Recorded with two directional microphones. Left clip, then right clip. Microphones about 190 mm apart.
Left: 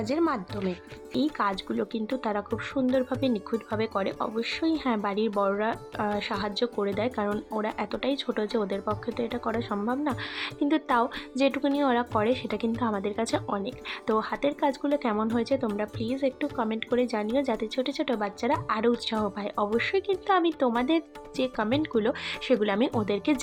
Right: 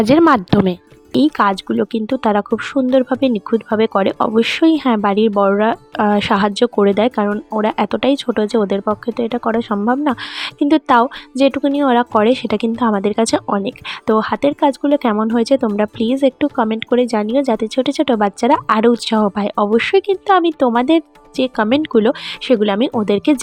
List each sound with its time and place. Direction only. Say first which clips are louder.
0.1 s speech: right 16 dB; 60° right (ahead or behind); by 23.4 s 45° right (ahead or behind)